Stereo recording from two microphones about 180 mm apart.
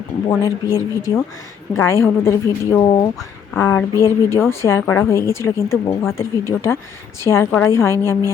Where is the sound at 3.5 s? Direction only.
15° left (ahead or behind).